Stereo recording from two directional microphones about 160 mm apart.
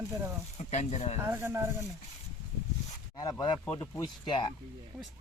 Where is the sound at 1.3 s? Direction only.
15° right (ahead or behind).